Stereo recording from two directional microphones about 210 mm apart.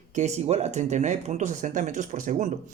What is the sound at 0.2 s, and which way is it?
Speech, 35° right (ahead or behind).